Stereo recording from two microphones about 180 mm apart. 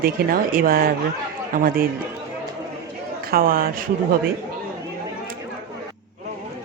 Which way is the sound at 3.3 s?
55° right (ahead or behind).